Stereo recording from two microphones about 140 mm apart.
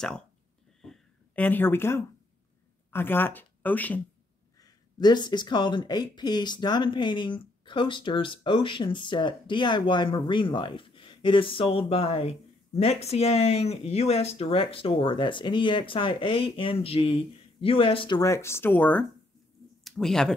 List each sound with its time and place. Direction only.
0.8 s a sound: 5° left (ahead or behind)
2.9 s speech: 15° left (ahead or behind)
4.6 s speech: 25° left (ahead or behind)
18.2 s speech: 20° left (ahead or behind)
19.8 s speech: centre (ahead or behind)